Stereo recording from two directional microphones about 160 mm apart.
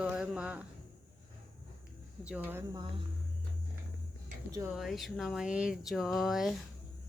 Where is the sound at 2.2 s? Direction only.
10° right (ahead or behind).